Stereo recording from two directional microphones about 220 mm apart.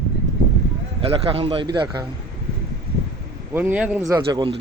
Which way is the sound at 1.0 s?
25° right (ahead or behind).